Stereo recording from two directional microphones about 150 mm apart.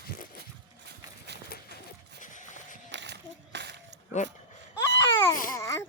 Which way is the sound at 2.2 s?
55° left (ahead or behind).